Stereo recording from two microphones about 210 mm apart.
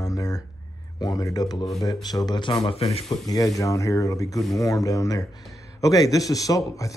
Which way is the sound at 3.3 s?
15° left (ahead or behind).